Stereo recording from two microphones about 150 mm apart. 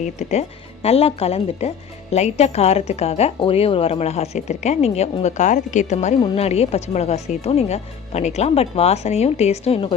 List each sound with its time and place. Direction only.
0.0 s speech: 50° left (ahead or behind)